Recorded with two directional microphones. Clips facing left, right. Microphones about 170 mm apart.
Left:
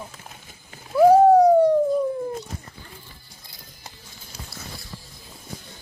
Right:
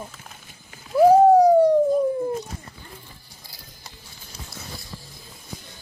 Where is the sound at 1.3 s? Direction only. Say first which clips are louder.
Even; 10° right (ahead or behind).